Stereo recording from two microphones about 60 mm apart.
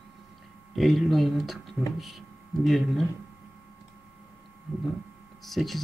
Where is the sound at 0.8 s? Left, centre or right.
Centre.